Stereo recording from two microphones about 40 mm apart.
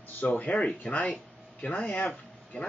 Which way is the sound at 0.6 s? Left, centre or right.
Left.